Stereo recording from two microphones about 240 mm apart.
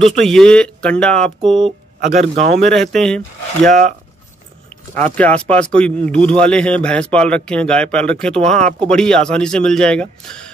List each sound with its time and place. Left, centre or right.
0.0 s speech: centre
2.0 s speech: right
2.6 s speech: centre
4.9 s speech: centre